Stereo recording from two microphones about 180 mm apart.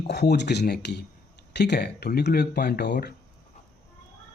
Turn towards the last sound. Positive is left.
turn(degrees=65)  # may be behind; listen again after turning